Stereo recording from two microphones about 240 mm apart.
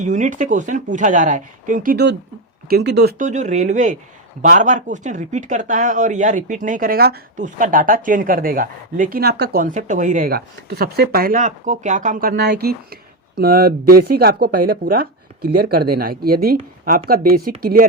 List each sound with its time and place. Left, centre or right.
0.0 s speech: right